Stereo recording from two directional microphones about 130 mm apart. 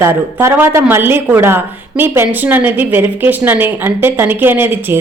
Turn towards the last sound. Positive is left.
turn(degrees=-15)  # may be behind; listen again after turning